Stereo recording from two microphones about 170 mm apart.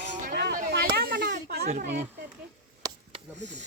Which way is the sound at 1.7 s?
45° right (ahead or behind).